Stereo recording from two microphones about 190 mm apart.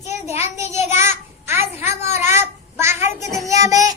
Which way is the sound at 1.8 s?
35° left (ahead or behind).